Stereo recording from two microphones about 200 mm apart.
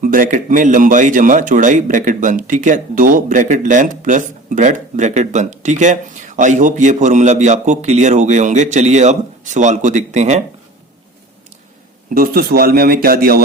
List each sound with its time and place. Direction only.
0.0 s speech: 40° right (ahead or behind)
12.1 s speech: 45° right (ahead or behind)